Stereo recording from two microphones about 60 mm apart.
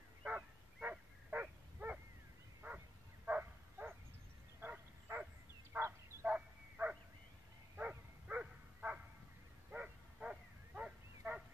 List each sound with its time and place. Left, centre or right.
0.3 s dog: right
2.6 s bow-wow: right
6.3 s bow-wow: right